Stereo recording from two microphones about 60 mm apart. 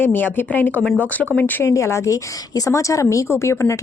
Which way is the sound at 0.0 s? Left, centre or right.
Left.